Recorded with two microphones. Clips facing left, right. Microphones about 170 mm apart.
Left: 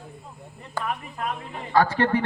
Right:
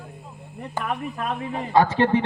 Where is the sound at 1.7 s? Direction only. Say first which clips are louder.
Right 2 dB; 20° right (ahead or behind).